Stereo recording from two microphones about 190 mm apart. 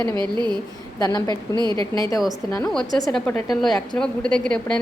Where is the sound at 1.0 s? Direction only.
20° left (ahead or behind).